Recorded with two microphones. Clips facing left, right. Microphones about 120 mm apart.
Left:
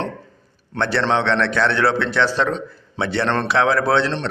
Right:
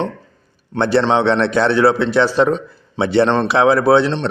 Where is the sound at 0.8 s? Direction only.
15° right (ahead or behind).